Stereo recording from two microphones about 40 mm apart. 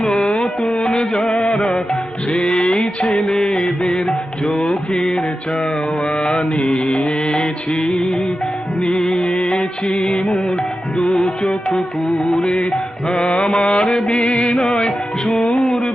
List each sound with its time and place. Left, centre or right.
0.0 s music: left
4.6 s mantra: left
6.1 s music: centre